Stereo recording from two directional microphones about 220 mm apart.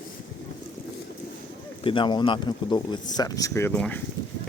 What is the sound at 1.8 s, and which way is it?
Speech, 20° left (ahead or behind).